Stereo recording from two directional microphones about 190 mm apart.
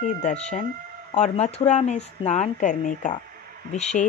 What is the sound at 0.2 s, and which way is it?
Speech, 35° left (ahead or behind).